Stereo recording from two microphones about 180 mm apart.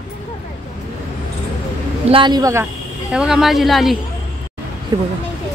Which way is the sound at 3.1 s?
5° right (ahead or behind).